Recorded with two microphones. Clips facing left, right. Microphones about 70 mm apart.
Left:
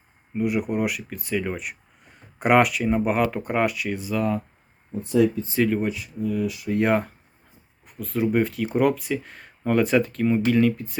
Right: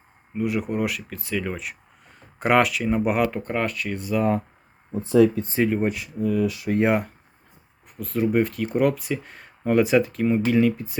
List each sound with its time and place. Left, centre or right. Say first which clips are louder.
0.3 s speech: left 1 dB; centre
3.4 s speech: left 2 dB; centre
4.9 s speech: right 3 dB; right
6.7 s speech: even; centre
7.9 s speech: right 1 dB; centre